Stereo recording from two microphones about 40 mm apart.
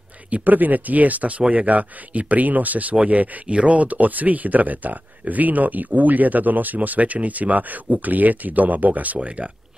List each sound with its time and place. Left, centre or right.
0.3 s speech: right